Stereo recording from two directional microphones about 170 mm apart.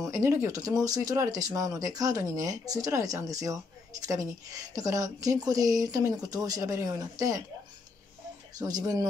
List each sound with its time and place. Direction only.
0.1 s speech: 15° right (ahead or behind)
8.5 s speech: 20° right (ahead or behind)